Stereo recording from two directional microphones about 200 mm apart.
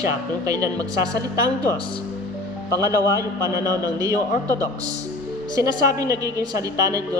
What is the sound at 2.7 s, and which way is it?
Speech, 15° right (ahead or behind).